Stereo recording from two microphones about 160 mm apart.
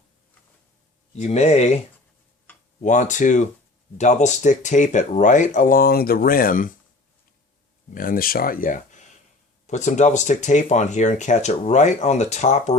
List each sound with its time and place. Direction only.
1.1 s speech: 45° left (ahead or behind)
2.5 s tick-tock: 10° left (ahead or behind)
2.8 s speech: 50° left (ahead or behind)
7.9 s speech: 60° left (ahead or behind); by 12.7 s 45° left (ahead or behind)